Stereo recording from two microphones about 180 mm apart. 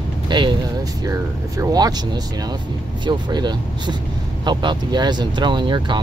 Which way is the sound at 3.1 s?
25° right (ahead or behind).